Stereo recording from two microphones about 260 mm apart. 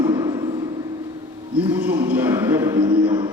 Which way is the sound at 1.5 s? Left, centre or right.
Centre.